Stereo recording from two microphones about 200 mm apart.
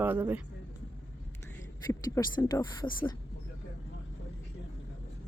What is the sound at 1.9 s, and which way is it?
Speech, 20° left (ahead or behind).